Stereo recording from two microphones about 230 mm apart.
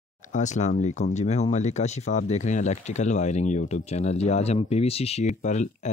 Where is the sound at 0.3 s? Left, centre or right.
Left.